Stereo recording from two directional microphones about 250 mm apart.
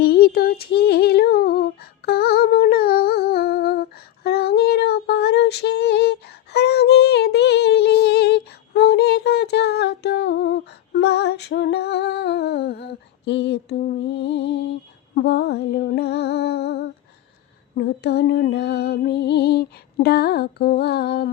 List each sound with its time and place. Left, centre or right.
0.0 s female singing: left
15.1 s music: left